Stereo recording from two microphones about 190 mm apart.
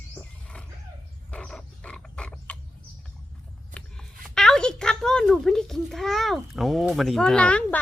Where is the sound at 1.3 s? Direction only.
5° left (ahead or behind).